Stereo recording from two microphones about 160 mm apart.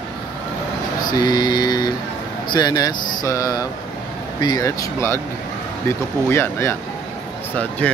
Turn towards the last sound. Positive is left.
turn(degrees=10)  # may be behind; listen again after turning